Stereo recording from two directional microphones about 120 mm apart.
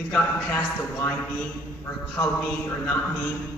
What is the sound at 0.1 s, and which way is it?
A man's voice, 15° left (ahead or behind).